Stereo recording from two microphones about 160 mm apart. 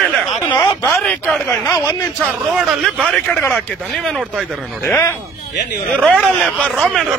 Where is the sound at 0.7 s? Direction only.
15° left (ahead or behind).